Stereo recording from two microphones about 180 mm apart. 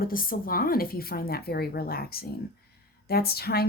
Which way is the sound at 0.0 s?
50° left (ahead or behind).